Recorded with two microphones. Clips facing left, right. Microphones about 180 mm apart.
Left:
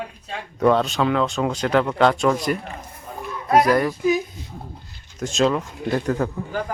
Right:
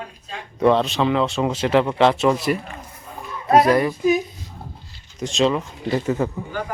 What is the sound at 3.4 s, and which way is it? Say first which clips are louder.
Speech: right 2 dB; 25° right (ahead or behind).